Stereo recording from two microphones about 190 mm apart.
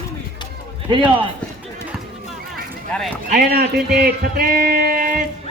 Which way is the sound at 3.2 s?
45° right (ahead or behind).